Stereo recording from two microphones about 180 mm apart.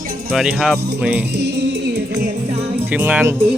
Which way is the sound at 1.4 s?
70° right (ahead or behind).